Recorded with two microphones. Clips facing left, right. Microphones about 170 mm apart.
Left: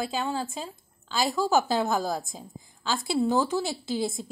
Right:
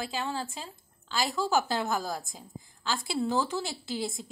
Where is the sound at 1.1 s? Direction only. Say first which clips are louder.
Left 4 dB; 15° left (ahead or behind).